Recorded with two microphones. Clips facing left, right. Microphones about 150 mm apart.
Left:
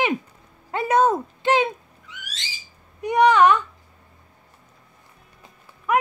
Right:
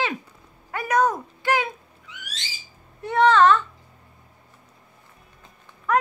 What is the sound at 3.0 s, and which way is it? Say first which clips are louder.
Speech: left 1 dB; 15° left (ahead or behind).